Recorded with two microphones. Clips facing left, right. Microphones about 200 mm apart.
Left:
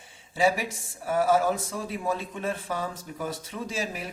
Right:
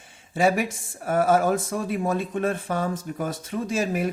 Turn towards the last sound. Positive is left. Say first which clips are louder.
# right 8 dB
turn(degrees=-50)  # may be behind; listen again after turning